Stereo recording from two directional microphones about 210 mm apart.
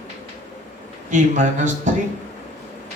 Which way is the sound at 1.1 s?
35° right (ahead or behind).